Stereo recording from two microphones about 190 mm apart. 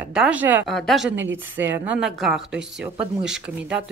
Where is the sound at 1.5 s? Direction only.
10° right (ahead or behind).